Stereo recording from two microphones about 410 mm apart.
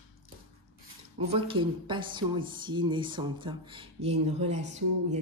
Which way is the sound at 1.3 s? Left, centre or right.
Centre.